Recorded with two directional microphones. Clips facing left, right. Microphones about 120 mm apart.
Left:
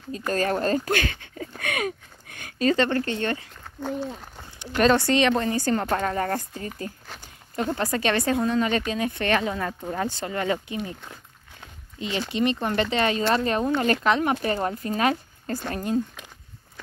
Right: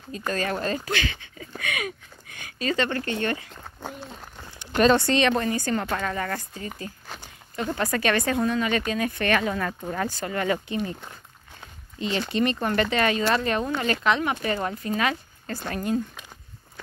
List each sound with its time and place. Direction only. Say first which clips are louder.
0.3 s speech: left 4 dB; 40° left (ahead or behind)
5.1 s a woman's voice: left 1 dB; 20° left (ahead or behind); by 6.7 s 40° left (ahead or behind)
7.5 s a woman's voice: left 1 dB; 30° left (ahead or behind); by 11.0 s 15° left (ahead or behind)
12.0 s a woman's voice: right 1 dB; 15° left (ahead or behind); by 16.0 s 30° left (ahead or behind)